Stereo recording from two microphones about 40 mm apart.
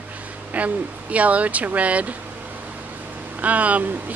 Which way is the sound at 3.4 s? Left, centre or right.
Right.